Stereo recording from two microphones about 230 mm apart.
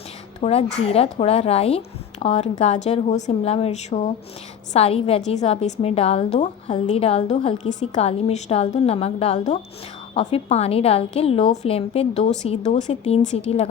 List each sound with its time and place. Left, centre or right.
0.3 s a woman's voice: left